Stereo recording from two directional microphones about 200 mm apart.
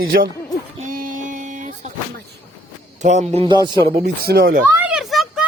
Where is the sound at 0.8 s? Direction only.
45° right (ahead or behind).